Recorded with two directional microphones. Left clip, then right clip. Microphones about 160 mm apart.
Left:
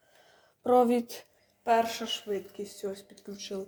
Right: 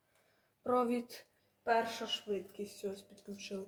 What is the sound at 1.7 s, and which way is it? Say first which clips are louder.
Speech: left 7 dB; 55° left (ahead or behind).